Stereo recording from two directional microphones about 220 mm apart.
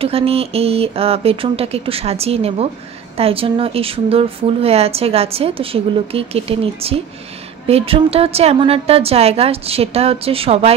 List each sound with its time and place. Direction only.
0.0 s speech: 25° right (ahead or behind)